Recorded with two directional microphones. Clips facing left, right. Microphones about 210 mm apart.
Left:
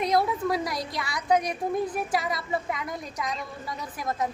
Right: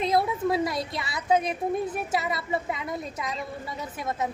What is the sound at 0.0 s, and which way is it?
A woman's voice, 25° right (ahead or behind).